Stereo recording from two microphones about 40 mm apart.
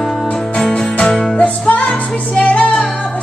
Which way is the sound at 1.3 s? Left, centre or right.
Left.